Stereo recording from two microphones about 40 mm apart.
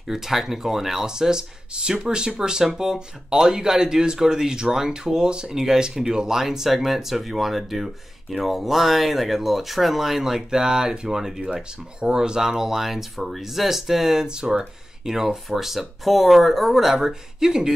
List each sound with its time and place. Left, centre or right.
0.1 s speech: centre
11.5 s speech: right
12.2 s speech: centre